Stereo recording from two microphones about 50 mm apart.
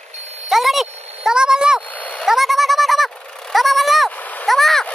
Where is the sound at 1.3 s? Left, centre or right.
Centre.